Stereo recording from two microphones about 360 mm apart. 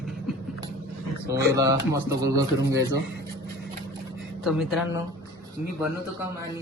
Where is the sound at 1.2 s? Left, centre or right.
Right.